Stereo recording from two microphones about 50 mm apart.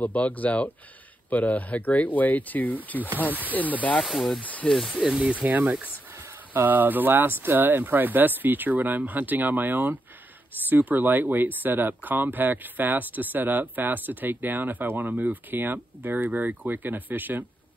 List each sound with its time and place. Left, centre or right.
0.0 s speech: left
4.0 s speech: centre
4.4 s speech: left
4.9 s speech: centre
5.4 s speech: right